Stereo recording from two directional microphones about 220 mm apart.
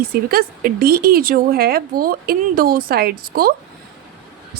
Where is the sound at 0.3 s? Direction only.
45° right (ahead or behind).